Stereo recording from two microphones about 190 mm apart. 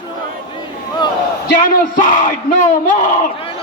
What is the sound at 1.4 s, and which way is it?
Speech, 50° left (ahead or behind).